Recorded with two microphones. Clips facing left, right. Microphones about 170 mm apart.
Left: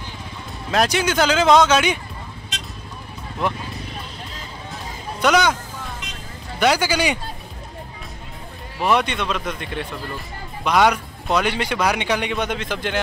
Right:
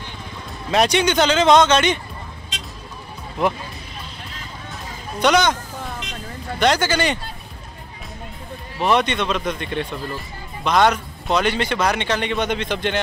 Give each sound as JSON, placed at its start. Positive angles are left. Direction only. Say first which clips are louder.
{"t": 0.7, "sound": "speech", "louder": "right 2 dB", "side_deg": 0}
{"t": 5.2, "sound": "a man's voice", "louder": "right 1 dB", "side_deg": 5}
{"t": 6.6, "sound": "a man's voice", "louder": "even", "side_deg": 10}
{"t": 8.7, "sound": "a man's voice", "louder": "right 1 dB", "side_deg": 5}